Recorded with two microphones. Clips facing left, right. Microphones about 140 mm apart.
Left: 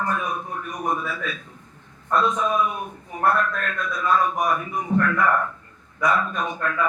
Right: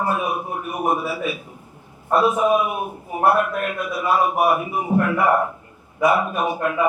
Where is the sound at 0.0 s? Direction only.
10° right (ahead or behind).